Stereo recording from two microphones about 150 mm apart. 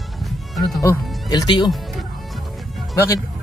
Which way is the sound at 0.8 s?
25° left (ahead or behind).